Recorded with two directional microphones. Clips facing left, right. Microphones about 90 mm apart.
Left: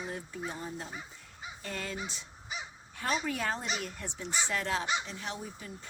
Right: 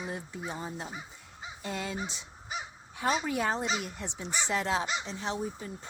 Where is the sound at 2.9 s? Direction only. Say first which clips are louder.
Right 4 dB; 15° right (ahead or behind).